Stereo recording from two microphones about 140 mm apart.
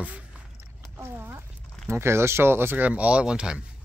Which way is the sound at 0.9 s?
15° right (ahead or behind).